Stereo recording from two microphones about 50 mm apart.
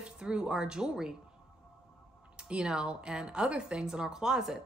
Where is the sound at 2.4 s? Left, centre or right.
Centre.